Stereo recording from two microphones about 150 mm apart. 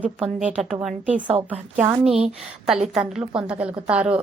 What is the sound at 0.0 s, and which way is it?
A woman's voice, 10° right (ahead or behind).